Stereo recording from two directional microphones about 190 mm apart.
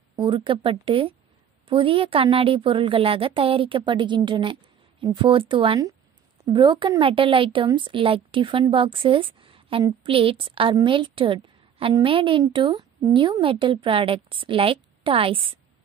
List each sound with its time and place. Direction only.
0.1 s a woman's voice: 25° right (ahead or behind)